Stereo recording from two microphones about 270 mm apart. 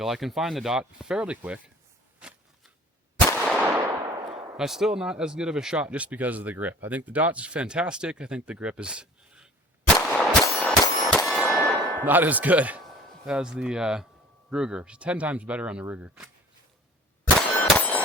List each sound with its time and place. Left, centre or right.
0.0 s speech: centre
2.1 s a sound: centre
3.4 s gunshot: centre
4.0 s gunshot: centre
4.5 s speech: centre
10.1 s clang: centre
12.0 s speech: centre
17.4 s clang: centre